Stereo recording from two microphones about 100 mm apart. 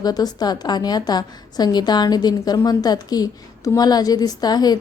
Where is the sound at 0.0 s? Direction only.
40° left (ahead or behind).